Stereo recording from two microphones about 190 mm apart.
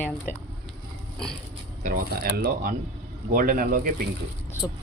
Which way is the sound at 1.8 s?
55° right (ahead or behind).